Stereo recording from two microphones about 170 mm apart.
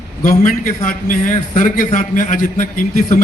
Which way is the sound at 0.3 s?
55° left (ahead or behind).